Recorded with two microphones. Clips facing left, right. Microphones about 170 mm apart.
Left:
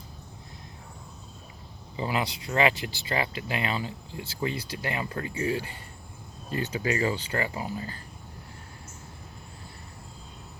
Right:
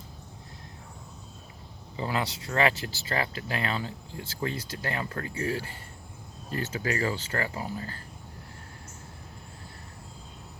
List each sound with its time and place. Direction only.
2.0 s speech: 15° left (ahead or behind)